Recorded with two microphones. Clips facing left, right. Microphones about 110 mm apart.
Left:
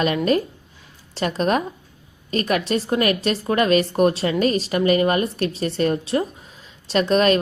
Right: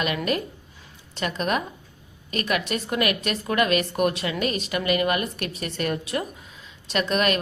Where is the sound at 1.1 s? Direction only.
35° left (ahead or behind).